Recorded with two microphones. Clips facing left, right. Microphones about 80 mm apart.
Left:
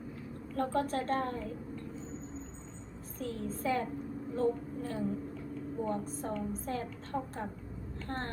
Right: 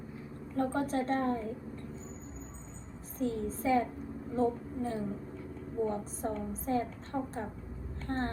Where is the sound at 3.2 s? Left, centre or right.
Right.